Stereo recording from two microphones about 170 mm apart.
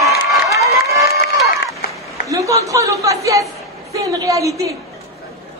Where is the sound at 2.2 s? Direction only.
20° right (ahead or behind).